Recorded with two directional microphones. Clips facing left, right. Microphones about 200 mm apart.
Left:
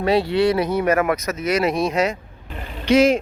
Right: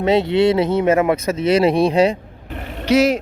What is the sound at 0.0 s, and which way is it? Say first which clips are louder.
Speech: right 3 dB; 20° right (ahead or behind).